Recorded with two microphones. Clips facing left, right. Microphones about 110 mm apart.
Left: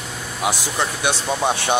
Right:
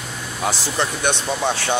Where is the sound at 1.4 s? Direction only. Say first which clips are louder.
Left 1 dB; 15° left (ahead or behind).